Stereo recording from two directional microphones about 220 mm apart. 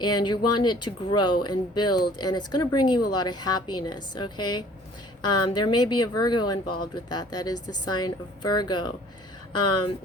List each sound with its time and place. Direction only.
0.0 s speech: 20° left (ahead or behind)